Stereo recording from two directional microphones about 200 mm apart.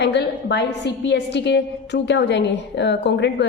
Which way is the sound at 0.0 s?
60° left (ahead or behind).